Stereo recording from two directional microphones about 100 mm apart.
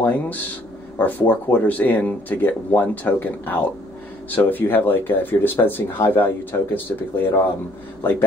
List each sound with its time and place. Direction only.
0.0 s speech: 15° left (ahead or behind)